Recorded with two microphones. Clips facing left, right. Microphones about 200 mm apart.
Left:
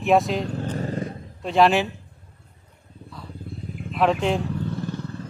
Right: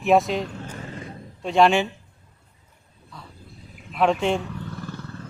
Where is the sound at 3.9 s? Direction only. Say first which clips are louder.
Even; centre (ahead or behind).